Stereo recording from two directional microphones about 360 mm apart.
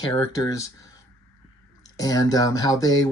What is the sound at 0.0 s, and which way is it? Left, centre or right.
Speech, centre.